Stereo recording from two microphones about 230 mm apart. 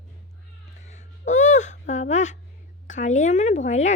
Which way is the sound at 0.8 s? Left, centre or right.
Left.